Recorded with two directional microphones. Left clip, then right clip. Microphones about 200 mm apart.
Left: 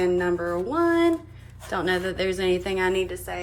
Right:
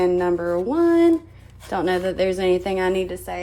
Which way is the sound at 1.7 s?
50° right (ahead or behind).